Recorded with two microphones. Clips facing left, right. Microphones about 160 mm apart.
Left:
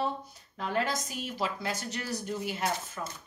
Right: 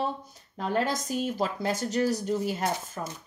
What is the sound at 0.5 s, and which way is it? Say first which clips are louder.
Speech: right 3 dB; 40° right (ahead or behind).